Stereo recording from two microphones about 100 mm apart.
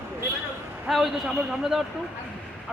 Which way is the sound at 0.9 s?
Centre (ahead or behind).